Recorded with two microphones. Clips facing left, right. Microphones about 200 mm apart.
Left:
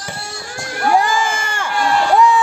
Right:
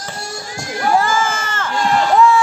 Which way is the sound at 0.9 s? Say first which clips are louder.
Even; 15° left (ahead or behind).